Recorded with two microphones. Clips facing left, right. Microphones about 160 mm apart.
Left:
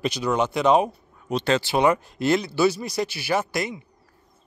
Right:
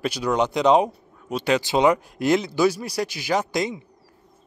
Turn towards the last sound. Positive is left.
turn(degrees=-20)  # may be behind; listen again after turning